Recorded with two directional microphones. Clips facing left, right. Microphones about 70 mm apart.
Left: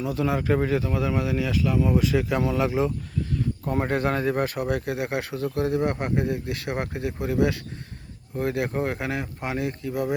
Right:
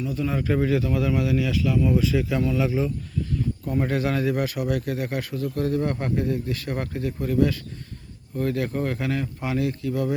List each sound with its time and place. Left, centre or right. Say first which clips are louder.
0.0 s speech: left 2 dB; left
0.3 s speech: right 3 dB; left
1.8 s speech: even; left
3.8 s speech: right 1 dB; left
5.7 s speech: even; left
9.8 s speech: right 1 dB; centre